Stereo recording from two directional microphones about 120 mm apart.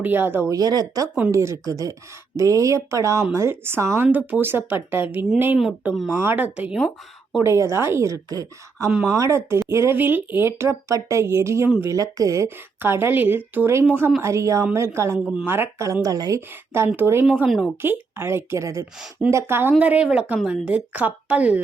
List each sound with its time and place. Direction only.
0.0 s a woman's voice: 15° right (ahead or behind)
0.5 s a woman's voice: 35° right (ahead or behind); by 5.2 s 15° right (ahead or behind)
5.9 s speech: centre (ahead or behind)
6.1 s a woman's voice: 15° right (ahead or behind)
16.5 s a woman's voice: 20° right (ahead or behind)
18.9 s speech: 5° right (ahead or behind)
19.3 s a woman's voice: 20° right (ahead or behind)